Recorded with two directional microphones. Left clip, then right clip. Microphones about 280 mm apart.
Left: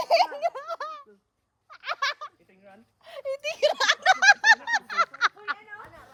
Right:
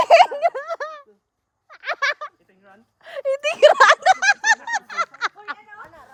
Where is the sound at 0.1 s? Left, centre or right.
Right.